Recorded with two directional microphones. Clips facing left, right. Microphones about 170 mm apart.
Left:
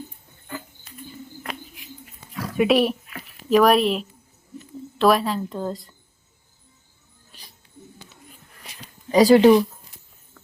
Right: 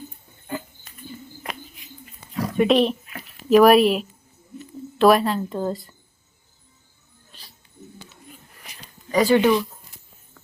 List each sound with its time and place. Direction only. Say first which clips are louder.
2.6 s a woman's voice: even; 5° left (ahead or behind)
9.1 s speech: left 4 dB; 35° left (ahead or behind)